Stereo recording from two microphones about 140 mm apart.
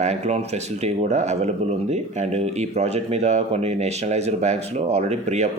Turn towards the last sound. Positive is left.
turn(degrees=-55)  # may be behind; listen again after turning